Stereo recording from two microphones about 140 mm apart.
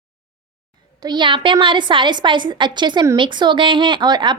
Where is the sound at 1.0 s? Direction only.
30° right (ahead or behind).